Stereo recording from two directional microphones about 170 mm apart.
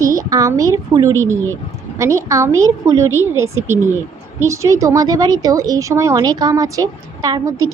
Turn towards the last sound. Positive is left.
turn(degrees=-20)  # may be behind; listen again after turning